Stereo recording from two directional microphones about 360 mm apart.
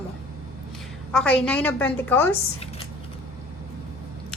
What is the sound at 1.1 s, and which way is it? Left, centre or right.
A woman's voice, centre.